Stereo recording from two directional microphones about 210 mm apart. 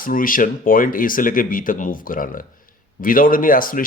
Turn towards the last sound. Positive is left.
turn(degrees=40)  # may be behind; listen again after turning